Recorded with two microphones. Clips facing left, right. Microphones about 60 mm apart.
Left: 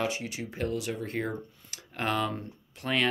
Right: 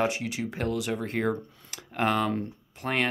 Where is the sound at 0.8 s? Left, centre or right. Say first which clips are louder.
Right 4 dB; right.